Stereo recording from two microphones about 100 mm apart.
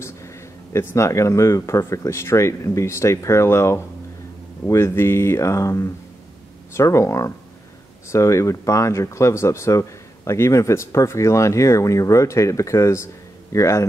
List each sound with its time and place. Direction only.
0.0 s speech: 30° left (ahead or behind)